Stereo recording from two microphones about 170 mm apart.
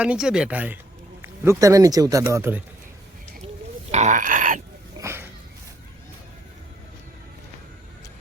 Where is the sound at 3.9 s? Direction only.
45° right (ahead or behind).